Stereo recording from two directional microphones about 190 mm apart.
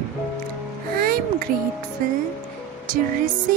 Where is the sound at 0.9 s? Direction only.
50° right (ahead or behind).